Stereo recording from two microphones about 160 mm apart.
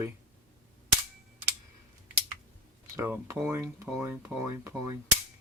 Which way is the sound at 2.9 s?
15° right (ahead or behind).